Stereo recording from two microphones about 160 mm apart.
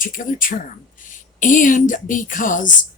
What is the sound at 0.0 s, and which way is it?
Speech, 60° left (ahead or behind).